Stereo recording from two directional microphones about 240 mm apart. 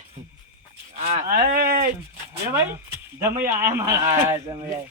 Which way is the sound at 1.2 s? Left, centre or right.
Right.